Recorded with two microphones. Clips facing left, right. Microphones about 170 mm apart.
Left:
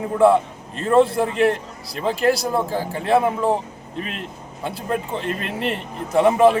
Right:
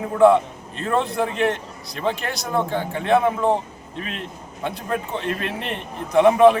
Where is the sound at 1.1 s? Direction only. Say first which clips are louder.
Left 3 dB; centre (ahead or behind).